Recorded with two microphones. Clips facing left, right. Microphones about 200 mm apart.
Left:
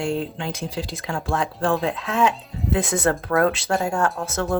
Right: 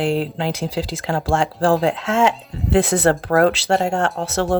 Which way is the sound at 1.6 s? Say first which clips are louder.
Right 6 dB; 90° right.